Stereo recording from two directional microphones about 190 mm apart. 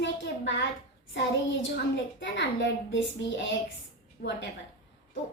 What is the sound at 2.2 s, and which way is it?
A child's voice, 75° left (ahead or behind).